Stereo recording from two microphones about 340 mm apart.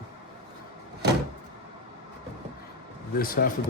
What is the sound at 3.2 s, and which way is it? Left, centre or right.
Speech, left.